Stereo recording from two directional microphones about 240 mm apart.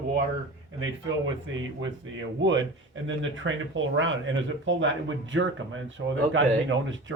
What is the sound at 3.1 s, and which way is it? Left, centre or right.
Speech, right.